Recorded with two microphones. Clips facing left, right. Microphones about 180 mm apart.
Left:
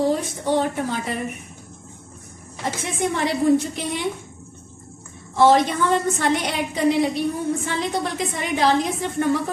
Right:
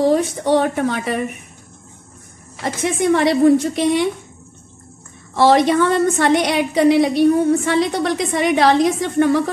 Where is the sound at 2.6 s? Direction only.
75° right (ahead or behind).